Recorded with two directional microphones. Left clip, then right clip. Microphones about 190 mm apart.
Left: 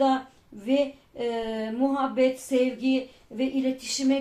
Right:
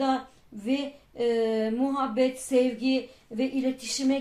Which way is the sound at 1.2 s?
35° right (ahead or behind).